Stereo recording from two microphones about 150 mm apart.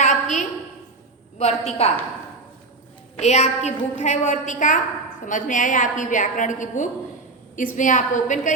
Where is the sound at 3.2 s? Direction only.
50° left (ahead or behind).